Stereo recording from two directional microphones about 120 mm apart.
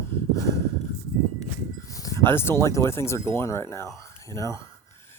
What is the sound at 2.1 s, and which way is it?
Speech, 20° left (ahead or behind).